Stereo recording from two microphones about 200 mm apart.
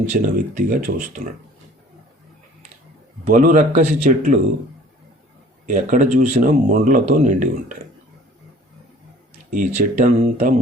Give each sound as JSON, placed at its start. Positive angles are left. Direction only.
{"t": 0.0, "sound": "speech", "side_deg": -40}
{"t": 3.2, "sound": "speech", "side_deg": -40}
{"t": 5.6, "sound": "speech", "side_deg": -40}
{"t": 9.5, "sound": "speech", "side_deg": -40}